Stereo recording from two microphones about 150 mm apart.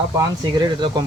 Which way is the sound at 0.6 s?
30° right (ahead or behind).